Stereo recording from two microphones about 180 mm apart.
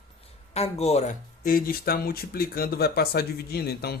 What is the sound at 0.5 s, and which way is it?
Speech, 35° left (ahead or behind).